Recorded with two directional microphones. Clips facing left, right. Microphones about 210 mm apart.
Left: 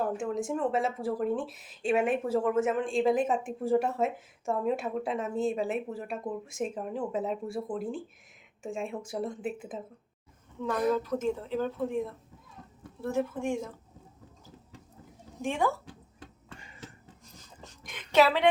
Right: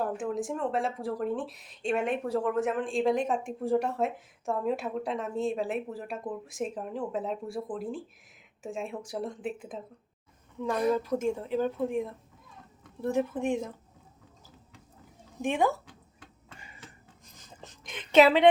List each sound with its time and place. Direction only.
0.0 s speech: centre (ahead or behind)
10.9 s speech: 15° right (ahead or behind)
15.4 s speech: 15° right (ahead or behind)
17.6 s a sound: 20° right (ahead or behind)